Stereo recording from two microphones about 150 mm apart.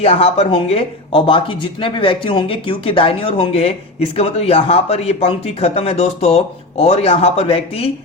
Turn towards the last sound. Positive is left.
turn(degrees=40)  # may be behind; listen again after turning